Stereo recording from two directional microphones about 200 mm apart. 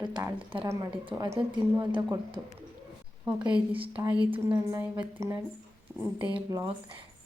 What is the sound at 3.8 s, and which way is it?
Speech, 25° right (ahead or behind).